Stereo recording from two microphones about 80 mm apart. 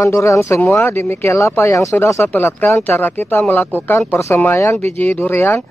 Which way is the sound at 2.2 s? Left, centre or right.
Left.